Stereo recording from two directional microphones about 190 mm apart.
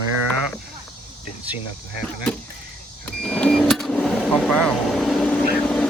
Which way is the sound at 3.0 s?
5° left (ahead or behind).